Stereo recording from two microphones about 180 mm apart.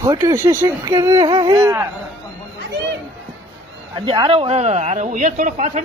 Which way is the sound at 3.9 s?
30° right (ahead or behind).